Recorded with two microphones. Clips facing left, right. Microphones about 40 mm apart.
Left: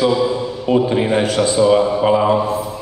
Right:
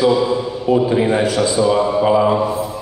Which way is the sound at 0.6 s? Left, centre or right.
Left.